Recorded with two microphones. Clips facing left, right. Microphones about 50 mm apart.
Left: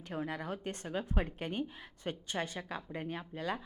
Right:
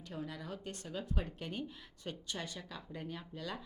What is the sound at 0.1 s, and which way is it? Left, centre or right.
Speech, left.